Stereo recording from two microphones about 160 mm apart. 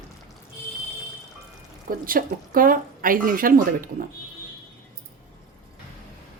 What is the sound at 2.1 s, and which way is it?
Speech, 65° right (ahead or behind).